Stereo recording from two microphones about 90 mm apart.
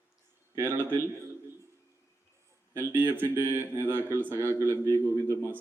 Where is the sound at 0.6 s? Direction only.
25° right (ahead or behind).